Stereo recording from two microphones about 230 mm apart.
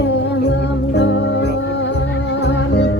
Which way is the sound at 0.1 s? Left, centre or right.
Left.